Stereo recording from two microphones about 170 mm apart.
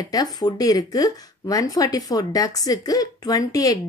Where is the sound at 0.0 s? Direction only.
25° left (ahead or behind).